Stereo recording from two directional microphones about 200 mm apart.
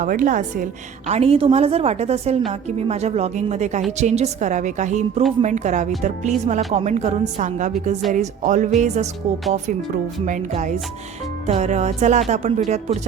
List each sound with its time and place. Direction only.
0.0 s a woman's voice: 40° right (ahead or behind)
10.2 s a woman's voice: 40° right (ahead or behind)